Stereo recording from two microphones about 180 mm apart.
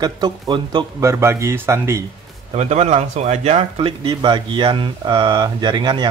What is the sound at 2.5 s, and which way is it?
Speech, 40° right (ahead or behind).